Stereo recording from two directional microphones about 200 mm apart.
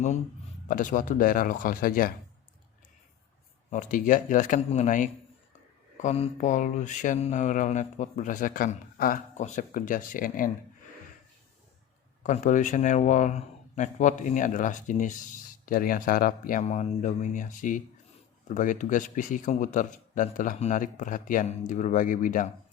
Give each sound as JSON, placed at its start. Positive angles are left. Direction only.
{"t": 0.7, "sound": "speech", "side_deg": 40}
{"t": 3.7, "sound": "speech", "side_deg": 40}
{"t": 12.2, "sound": "speech", "side_deg": 40}